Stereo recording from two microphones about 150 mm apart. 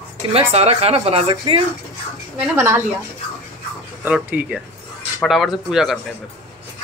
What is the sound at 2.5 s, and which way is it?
Speech, 20° right (ahead or behind).